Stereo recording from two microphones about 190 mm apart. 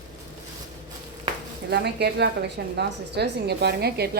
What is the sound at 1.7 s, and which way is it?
A woman's voice, 60° right (ahead or behind).